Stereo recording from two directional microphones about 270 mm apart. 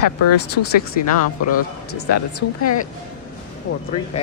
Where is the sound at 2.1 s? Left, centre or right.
Left.